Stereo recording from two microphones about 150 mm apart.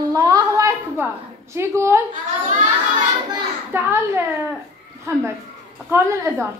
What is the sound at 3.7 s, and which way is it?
Speech, 15° right (ahead or behind).